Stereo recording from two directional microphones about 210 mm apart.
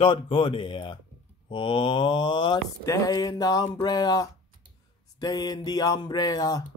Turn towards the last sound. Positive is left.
turn(degrees=20)  # may be behind; listen again after turning